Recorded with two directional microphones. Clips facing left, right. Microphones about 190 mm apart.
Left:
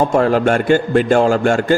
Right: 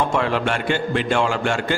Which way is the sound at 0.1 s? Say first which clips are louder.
Left 8 dB; 45° left (ahead or behind).